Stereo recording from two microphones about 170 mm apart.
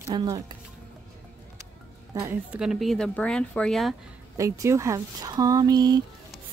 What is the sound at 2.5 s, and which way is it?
Speech, 5° right (ahead or behind).